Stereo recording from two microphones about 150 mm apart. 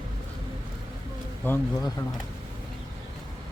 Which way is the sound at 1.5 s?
15° left (ahead or behind).